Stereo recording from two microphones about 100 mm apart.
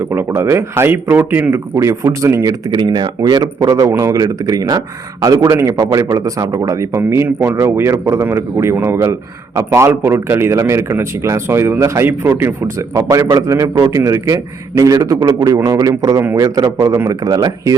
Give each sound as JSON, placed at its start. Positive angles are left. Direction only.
{"t": 0.1, "sound": "a man's voice", "side_deg": -25}
{"t": 2.7, "sound": "a man's voice", "side_deg": -50}